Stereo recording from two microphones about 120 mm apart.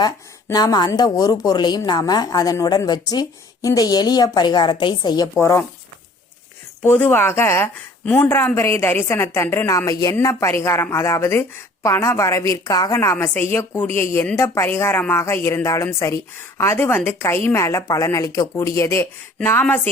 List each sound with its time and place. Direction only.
0.5 s a woman's voice: 35° left (ahead or behind)
5.4 s a woman's voice: 20° left (ahead or behind)
6.8 s a woman's voice: 15° left (ahead or behind)